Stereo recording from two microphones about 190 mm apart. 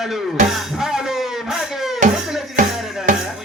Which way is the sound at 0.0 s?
Centre (ahead or behind).